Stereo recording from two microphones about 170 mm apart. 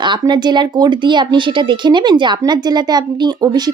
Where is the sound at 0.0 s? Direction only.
25° right (ahead or behind).